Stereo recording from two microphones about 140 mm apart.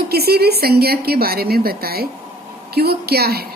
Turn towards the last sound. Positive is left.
turn(degrees=-90)